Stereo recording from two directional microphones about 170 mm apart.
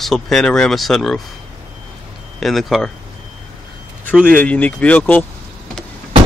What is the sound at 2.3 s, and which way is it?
Speech, centre (ahead or behind).